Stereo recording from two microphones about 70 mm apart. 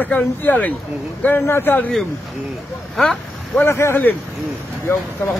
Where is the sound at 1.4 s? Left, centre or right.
Left.